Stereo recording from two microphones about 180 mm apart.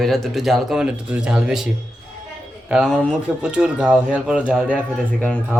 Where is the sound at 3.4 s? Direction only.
5° right (ahead or behind).